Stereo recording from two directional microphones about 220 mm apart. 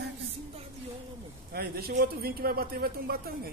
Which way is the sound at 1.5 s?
45° right (ahead or behind).